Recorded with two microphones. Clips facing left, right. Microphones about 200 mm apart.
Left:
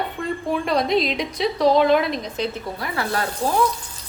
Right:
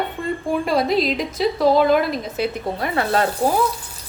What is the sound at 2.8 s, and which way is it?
Speech, 25° right (ahead or behind).